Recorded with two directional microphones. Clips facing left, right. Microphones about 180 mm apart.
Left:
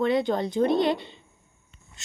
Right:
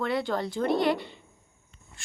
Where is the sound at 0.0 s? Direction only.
20° left (ahead or behind).